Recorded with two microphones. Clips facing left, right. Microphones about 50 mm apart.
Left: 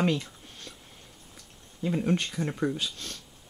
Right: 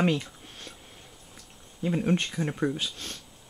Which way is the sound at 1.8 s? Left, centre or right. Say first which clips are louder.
Right 1 dB; centre.